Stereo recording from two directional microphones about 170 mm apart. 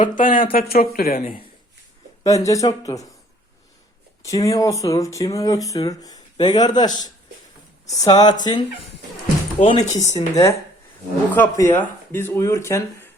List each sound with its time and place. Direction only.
0.0 s speech: 50° left (ahead or behind)
2.2 s speech: 20° left (ahead or behind)
4.3 s speech: 20° left (ahead or behind)
9.6 s speech: 40° left (ahead or behind)
10.3 s speech: 20° left (ahead or behind)